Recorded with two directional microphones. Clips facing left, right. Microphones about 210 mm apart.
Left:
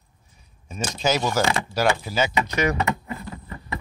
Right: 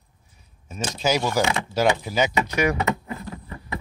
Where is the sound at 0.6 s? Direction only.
5° right (ahead or behind).